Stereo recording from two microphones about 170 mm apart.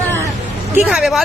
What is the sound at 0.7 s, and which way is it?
Speech, 5° right (ahead or behind).